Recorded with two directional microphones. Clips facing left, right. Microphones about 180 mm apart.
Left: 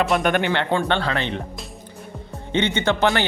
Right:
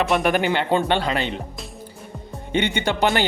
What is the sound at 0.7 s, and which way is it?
Speech, 15° right (ahead or behind).